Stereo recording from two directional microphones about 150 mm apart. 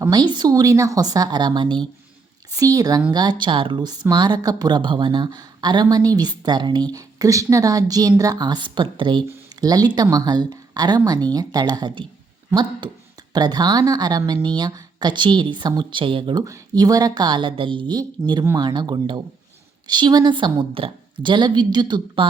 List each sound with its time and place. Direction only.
0.0 s a woman's voice: 25° right (ahead or behind)
13.3 s a woman's voice: 30° right (ahead or behind)